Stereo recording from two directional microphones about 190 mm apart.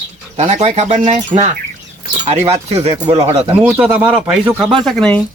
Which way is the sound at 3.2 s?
35° right (ahead or behind).